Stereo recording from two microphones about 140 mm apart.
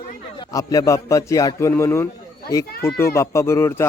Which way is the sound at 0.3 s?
30° left (ahead or behind).